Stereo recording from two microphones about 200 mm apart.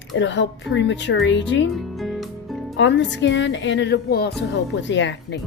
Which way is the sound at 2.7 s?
65° left (ahead or behind).